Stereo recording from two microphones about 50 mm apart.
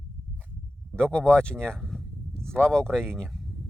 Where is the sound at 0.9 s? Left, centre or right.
Left.